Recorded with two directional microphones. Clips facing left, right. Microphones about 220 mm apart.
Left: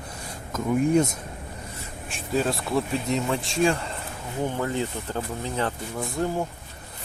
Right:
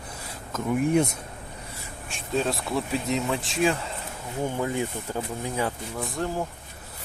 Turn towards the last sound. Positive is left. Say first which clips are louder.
# left 2 dB
turn(degrees=0)  # may be behind; listen again after turning